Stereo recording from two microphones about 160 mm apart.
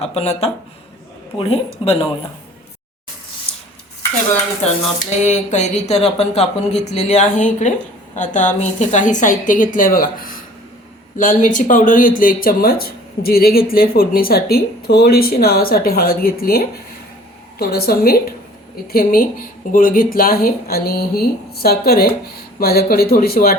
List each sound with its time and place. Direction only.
0.0 s a woman's voice: 40° left (ahead or behind)
5.2 s speech: 45° left (ahead or behind); by 23.6 s 70° left (ahead or behind)